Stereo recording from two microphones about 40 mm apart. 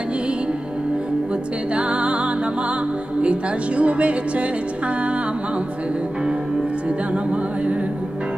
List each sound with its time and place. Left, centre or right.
1.8 s music: right
3.2 s speech: right